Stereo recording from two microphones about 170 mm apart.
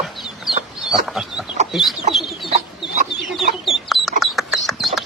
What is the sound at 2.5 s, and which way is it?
Chicken, 45° right (ahead or behind).